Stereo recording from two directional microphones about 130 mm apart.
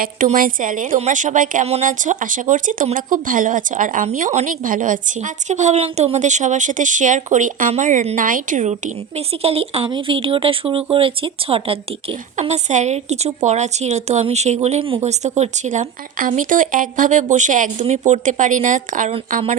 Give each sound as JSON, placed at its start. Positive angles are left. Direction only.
{"t": 0.2, "sound": "a woman's voice", "side_deg": -90}
{"t": 0.9, "sound": "a woman's voice", "side_deg": -65}
{"t": 7.7, "sound": "a woman's voice", "side_deg": -70}
{"t": 12.4, "sound": "a woman's voice", "side_deg": -65}